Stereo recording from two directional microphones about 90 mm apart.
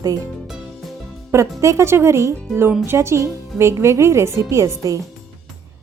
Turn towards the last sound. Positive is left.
turn(degrees=-35)  # may be behind; listen again after turning